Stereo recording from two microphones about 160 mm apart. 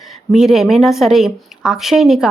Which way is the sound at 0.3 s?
Centre (ahead or behind).